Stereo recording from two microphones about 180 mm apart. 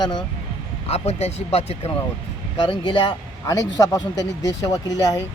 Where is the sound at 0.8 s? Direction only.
35° left (ahead or behind).